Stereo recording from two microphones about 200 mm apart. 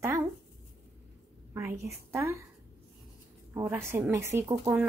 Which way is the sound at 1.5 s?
15° right (ahead or behind).